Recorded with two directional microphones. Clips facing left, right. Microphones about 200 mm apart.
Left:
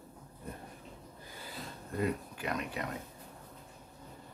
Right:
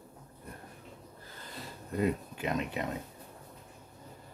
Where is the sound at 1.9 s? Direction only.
20° right (ahead or behind).